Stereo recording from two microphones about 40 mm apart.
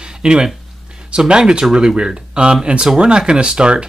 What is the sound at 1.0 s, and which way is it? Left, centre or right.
Speech, right.